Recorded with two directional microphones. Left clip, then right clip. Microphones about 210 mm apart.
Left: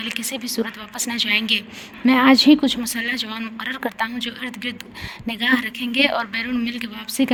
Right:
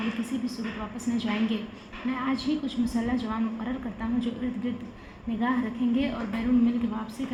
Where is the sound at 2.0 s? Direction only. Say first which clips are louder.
Left 16 dB; 60° left (ahead or behind).